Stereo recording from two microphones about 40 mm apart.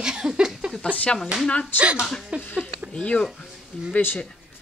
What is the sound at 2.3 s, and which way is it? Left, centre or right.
Speech, right.